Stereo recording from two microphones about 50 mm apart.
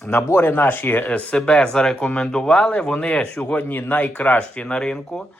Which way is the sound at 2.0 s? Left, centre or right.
Left.